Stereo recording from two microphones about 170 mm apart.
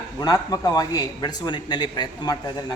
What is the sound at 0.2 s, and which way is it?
Speech, 25° left (ahead or behind).